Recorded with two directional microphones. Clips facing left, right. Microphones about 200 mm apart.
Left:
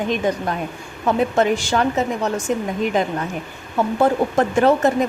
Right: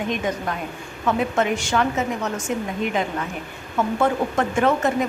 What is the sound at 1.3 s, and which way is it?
Speech, 35° left (ahead or behind).